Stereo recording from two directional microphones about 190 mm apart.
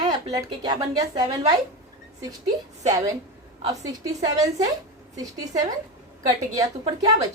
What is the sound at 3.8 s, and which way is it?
Speech, 20° right (ahead or behind).